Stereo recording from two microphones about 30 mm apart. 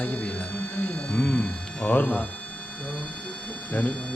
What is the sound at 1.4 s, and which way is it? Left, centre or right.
Speech, left.